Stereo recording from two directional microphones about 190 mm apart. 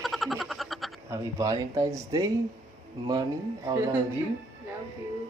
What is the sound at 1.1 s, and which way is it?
Speech, 15° right (ahead or behind).